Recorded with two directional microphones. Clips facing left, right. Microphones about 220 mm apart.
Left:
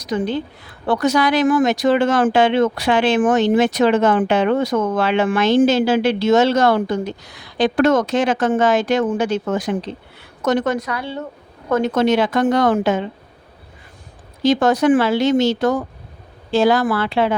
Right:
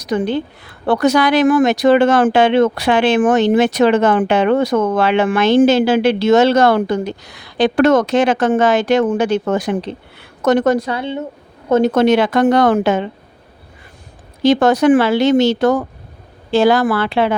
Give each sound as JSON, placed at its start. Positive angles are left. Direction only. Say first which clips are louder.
{"t": 0.0, "sound": "a woman's voice", "louder": "right 3 dB", "side_deg": -60}
{"t": 10.6, "sound": "a woman's voice", "louder": "right 6 dB", "side_deg": -35}
{"t": 11.9, "sound": "speech", "louder": "right 4 dB", "side_deg": -65}
{"t": 14.4, "sound": "speech", "louder": "right 3 dB", "side_deg": -70}